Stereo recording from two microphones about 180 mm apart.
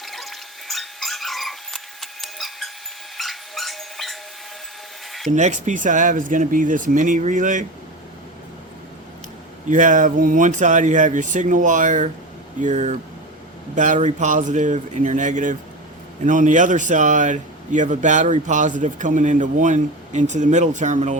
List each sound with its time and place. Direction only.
0.0 s dog: centre (ahead or behind)
3.2 s a sound: centre (ahead or behind)
5.3 s a man's voice: 40° right (ahead or behind)
9.6 s a man's voice: 45° right (ahead or behind)